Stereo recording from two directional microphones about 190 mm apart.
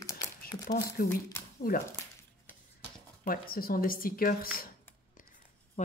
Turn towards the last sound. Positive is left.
turn(degrees=40)  # may be behind; listen again after turning